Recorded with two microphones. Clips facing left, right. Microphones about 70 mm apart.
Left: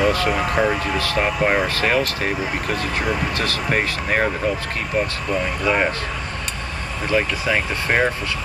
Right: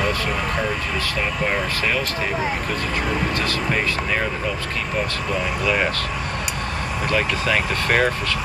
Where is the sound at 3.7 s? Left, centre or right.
Left.